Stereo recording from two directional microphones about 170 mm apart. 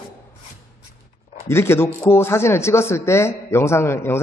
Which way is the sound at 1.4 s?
15° left (ahead or behind).